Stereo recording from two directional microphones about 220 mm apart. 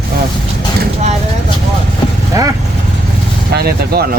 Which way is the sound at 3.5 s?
45° right (ahead or behind).